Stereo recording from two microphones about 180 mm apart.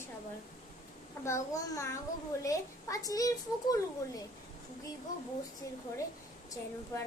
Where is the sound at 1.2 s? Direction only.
15° left (ahead or behind).